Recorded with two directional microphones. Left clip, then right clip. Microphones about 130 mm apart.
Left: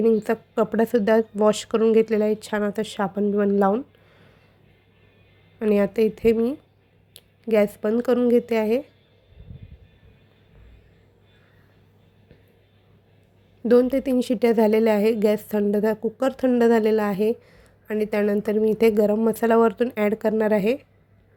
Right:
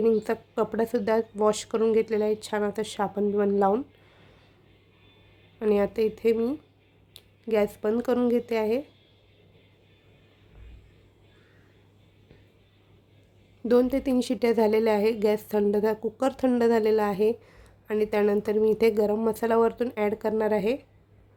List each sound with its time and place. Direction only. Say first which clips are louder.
0.2 s speech: left 4 dB; 15° left (ahead or behind)
5.5 s a woman's voice: left 4 dB; 20° left (ahead or behind)
13.7 s speech: left 4 dB; 10° left (ahead or behind)